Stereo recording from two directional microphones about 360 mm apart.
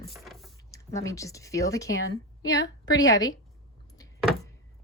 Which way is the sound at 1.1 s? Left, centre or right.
Centre.